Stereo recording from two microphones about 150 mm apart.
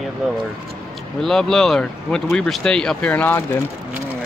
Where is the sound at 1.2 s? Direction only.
5° left (ahead or behind).